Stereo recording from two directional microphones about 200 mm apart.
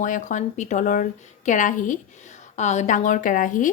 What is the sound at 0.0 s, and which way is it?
Speech, 40° left (ahead or behind).